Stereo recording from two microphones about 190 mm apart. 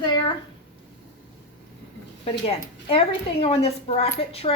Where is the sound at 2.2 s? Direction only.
30° left (ahead or behind).